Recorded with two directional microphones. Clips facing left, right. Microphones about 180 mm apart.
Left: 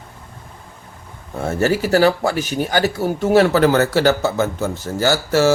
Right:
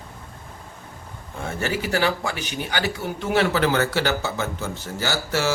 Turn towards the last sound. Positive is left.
turn(degrees=45)  # may be behind; listen again after turning